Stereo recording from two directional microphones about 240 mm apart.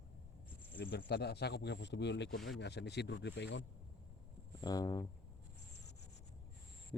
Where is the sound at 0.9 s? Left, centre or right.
Left.